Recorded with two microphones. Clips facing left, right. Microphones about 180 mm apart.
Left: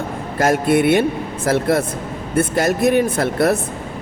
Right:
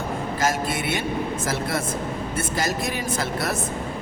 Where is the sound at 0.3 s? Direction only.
60° left (ahead or behind).